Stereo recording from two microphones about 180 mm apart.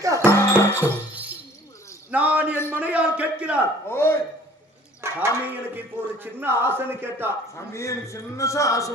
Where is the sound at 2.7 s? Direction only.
10° right (ahead or behind).